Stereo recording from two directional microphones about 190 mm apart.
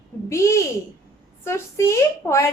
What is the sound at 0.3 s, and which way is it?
A woman's voice, 15° left (ahead or behind).